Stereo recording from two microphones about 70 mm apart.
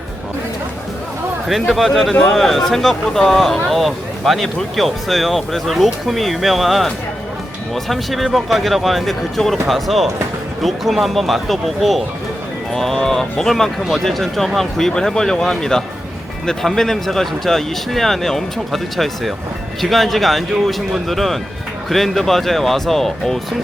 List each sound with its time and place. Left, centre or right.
1.5 s speech: centre